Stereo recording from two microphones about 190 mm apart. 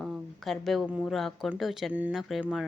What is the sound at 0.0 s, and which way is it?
Speech, centre (ahead or behind).